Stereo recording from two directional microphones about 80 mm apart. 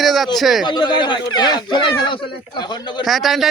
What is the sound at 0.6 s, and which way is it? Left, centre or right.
Speech, left.